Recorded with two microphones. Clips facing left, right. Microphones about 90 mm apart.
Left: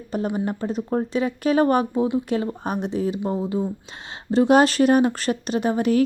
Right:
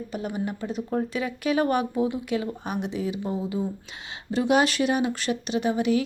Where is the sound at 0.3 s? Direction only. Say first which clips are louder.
Left 4 dB; 40° left (ahead or behind).